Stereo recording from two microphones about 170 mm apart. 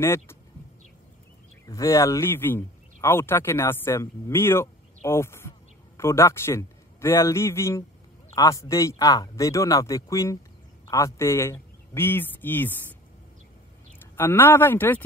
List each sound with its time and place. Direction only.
0.0 s speech: 15° left (ahead or behind)
1.7 s a man's voice: 20° left (ahead or behind)
14.1 s speech: 15° left (ahead or behind)